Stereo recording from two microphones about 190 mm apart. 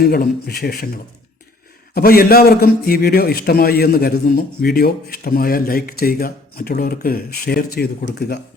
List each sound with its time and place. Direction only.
0.0 s a man's voice: 50° left (ahead or behind)
1.9 s a man's voice: 50° left (ahead or behind)